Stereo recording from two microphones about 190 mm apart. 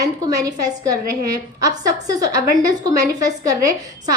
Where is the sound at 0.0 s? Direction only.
20° right (ahead or behind).